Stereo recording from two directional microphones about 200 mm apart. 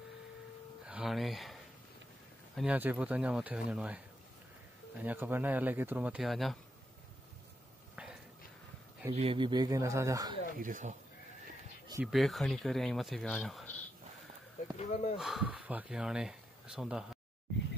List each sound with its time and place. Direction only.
0.8 s a sound: 5° right (ahead or behind)
2.5 s speech: 5° right (ahead or behind)
7.9 s a sound: 5° right (ahead or behind)
9.1 s speech: 30° right (ahead or behind)
10.6 s speech: 40° right (ahead or behind)
12.1 s speech: centre (ahead or behind)
14.8 s speech: 30° left (ahead or behind)
15.1 s speech: centre (ahead or behind)